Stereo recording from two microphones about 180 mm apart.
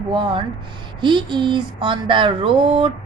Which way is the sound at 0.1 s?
25° right (ahead or behind).